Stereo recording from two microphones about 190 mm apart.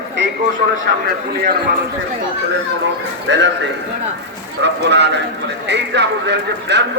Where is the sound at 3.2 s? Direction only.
70° right (ahead or behind).